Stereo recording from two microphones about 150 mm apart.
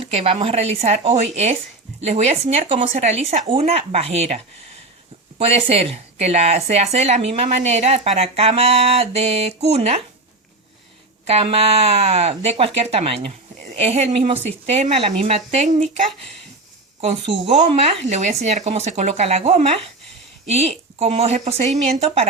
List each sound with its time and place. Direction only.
0.0 s speech: 40° right (ahead or behind)
5.4 s speech: 40° right (ahead or behind)
11.3 s speech: 45° right (ahead or behind)
17.0 s speech: 40° right (ahead or behind)